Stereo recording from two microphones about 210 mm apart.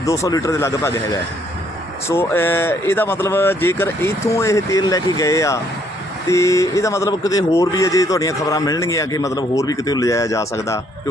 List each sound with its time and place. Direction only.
0.0 s speech: 15° left (ahead or behind)
2.0 s speech: 10° left (ahead or behind)